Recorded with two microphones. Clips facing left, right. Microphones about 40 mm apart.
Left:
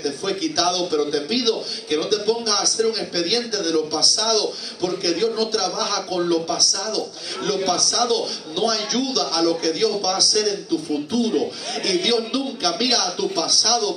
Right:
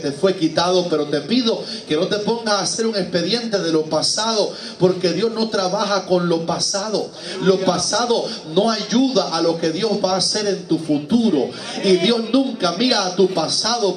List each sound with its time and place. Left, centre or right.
0.0 s a man's voice: centre